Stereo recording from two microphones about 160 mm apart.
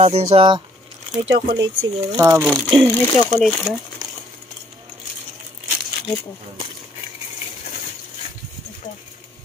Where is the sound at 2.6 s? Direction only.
10° left (ahead or behind).